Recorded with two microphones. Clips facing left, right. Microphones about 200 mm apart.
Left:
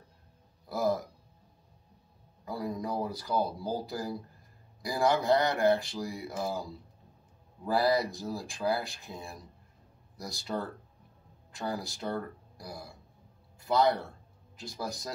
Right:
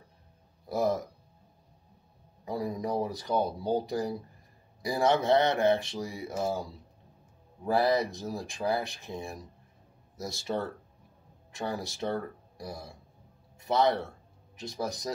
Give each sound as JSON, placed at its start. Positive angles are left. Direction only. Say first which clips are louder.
{"t": 0.7, "sound": "burping", "louder": "right 1 dB", "side_deg": -20}
{"t": 2.4, "sound": "speech", "louder": "right 2 dB", "side_deg": -25}
{"t": 7.7, "sound": "speech", "louder": "right 1 dB", "side_deg": -20}
{"t": 13.7, "sound": "speech", "louder": "even", "side_deg": -20}